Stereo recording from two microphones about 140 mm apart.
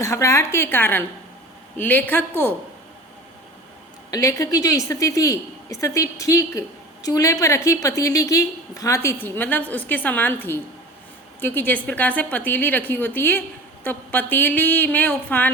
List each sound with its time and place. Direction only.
0.0 s a woman's voice: 20° left (ahead or behind)
4.1 s a woman's voice: 25° left (ahead or behind)